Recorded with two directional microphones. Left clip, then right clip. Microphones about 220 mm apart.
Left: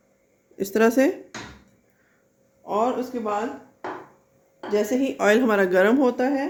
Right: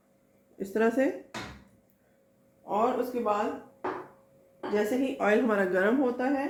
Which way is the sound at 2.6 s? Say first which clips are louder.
Left 5 dB; 50° left (ahead or behind).